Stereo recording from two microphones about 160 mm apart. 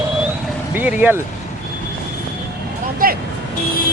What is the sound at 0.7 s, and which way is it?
Speech, 10° right (ahead or behind).